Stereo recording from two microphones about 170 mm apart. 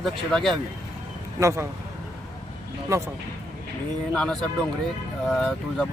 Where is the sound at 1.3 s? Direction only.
15° right (ahead or behind).